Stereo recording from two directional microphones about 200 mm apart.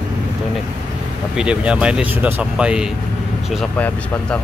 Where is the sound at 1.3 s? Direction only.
5° right (ahead or behind).